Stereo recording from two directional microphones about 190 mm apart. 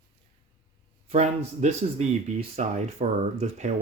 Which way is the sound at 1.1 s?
35° right (ahead or behind).